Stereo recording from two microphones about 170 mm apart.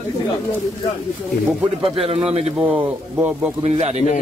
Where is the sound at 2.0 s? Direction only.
35° right (ahead or behind).